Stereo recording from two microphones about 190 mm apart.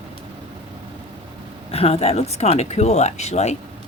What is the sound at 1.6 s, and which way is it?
Speech, 30° left (ahead or behind).